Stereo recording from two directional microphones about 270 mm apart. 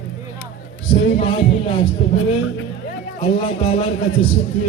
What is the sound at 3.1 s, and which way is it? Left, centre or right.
A man's voice, centre.